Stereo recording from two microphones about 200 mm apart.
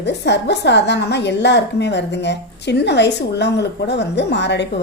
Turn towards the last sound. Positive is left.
turn(degrees=60)  # may be behind; listen again after turning